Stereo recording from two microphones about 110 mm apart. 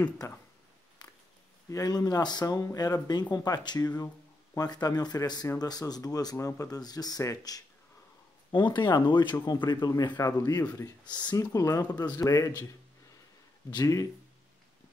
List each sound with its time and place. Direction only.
1.7 s speech: 35° left (ahead or behind)
8.5 s speech: 45° left (ahead or behind)
11.3 s speech: 30° left (ahead or behind)
13.7 s speech: 35° left (ahead or behind)